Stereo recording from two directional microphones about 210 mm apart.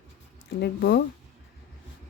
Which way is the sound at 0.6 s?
50° left (ahead or behind).